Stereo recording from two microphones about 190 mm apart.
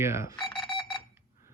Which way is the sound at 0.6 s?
25° left (ahead or behind).